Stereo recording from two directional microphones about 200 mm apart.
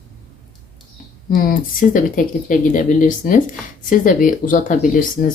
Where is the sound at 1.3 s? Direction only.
45° left (ahead or behind).